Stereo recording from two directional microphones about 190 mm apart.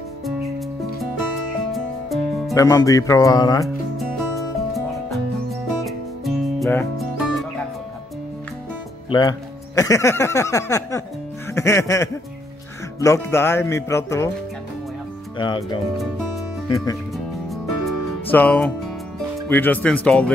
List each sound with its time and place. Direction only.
0.2 s music: centre (ahead or behind)
1.7 s music: centre (ahead or behind)
2.5 s speech: 15° left (ahead or behind)
3.6 s music: centre (ahead or behind)
9.8 s speech: 15° left (ahead or behind)
11.5 s music: 15° left (ahead or behind)
13.0 s speech: 15° left (ahead or behind)
15.3 s speech: 25° left (ahead or behind)
17.1 s music: centre (ahead or behind)
18.3 s speech: 10° left (ahead or behind)